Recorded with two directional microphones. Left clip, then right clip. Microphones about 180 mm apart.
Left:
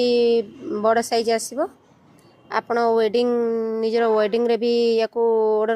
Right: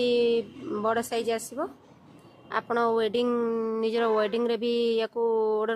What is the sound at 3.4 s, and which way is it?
Speech, 20° left (ahead or behind).